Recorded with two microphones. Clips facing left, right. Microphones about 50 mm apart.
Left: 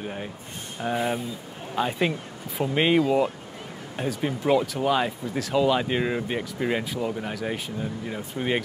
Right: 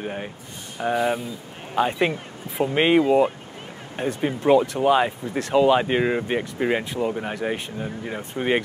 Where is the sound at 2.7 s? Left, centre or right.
Centre.